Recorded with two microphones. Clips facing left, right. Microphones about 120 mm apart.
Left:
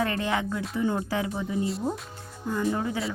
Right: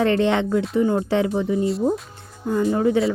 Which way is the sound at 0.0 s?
30° right (ahead or behind).